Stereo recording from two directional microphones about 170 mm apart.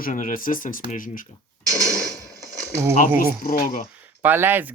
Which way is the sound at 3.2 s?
60° left (ahead or behind).